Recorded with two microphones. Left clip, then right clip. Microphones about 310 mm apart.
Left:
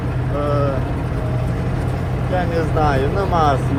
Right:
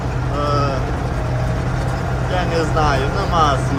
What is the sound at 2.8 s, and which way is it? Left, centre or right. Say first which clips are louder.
Speech: even; centre.